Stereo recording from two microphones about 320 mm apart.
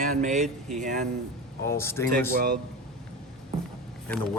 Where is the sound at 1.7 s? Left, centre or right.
Centre.